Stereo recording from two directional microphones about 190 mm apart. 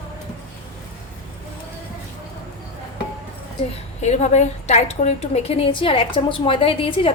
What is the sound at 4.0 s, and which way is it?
A woman's voice, 35° left (ahead or behind).